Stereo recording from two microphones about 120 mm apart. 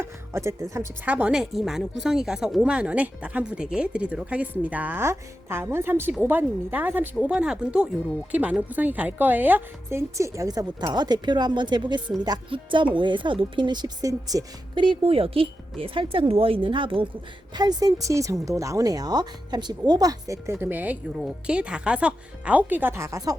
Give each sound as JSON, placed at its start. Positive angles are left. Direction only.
{"t": 0.0, "sound": "music", "side_deg": -25}
{"t": 1.0, "sound": "a woman's voice", "side_deg": -10}
{"t": 17.5, "sound": "a woman's voice", "side_deg": -35}